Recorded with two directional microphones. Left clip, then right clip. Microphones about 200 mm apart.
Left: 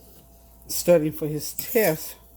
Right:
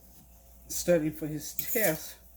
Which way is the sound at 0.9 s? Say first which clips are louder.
Left 8 dB; 45° left (ahead or behind).